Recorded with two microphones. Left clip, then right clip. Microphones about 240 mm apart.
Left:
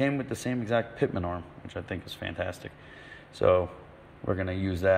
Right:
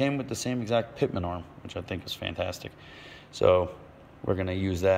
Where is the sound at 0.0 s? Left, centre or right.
Centre.